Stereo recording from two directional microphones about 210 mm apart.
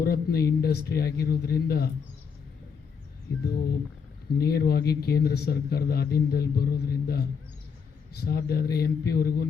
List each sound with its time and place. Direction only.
0.0 s a man's voice: 45° left (ahead or behind)
4.4 s a man's voice: 45° left (ahead or behind)